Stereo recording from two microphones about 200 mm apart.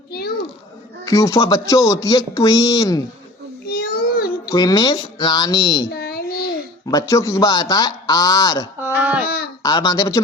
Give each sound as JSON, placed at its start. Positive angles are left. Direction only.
{"t": 0.1, "sound": "children playing", "side_deg": 50}
{"t": 1.0, "sound": "speech", "side_deg": 15}
{"t": 3.7, "sound": "a sound", "side_deg": 50}
{"t": 4.4, "sound": "speech", "side_deg": 20}
{"t": 5.9, "sound": "babbling", "side_deg": 50}
{"t": 6.8, "sound": "speech", "side_deg": 15}
{"t": 8.8, "sound": "speech", "side_deg": -10}
{"t": 9.2, "sound": "a sound", "side_deg": 50}
{"t": 9.6, "sound": "speech", "side_deg": 20}